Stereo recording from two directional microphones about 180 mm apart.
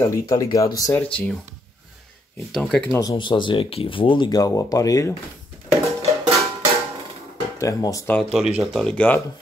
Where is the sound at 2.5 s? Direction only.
5° left (ahead or behind).